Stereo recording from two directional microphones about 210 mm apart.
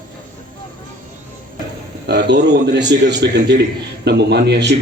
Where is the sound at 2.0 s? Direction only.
55° right (ahead or behind).